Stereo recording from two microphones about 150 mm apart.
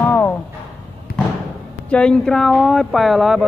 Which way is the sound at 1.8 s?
5° left (ahead or behind).